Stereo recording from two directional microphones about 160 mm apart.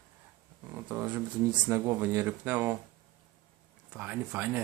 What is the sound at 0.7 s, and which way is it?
Speech, 15° right (ahead or behind).